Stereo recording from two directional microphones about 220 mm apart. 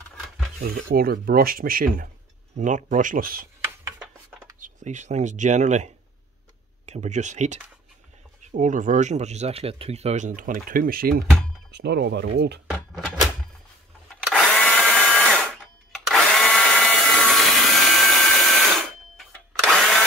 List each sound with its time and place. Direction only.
0.6 s speech: 45° right (ahead or behind)
4.6 s speech: 35° right (ahead or behind)
6.9 s speech: 30° right (ahead or behind); by 12.6 s 50° right (ahead or behind)
12.7 s a sound: centre (ahead or behind)
19.6 s drill: centre (ahead or behind)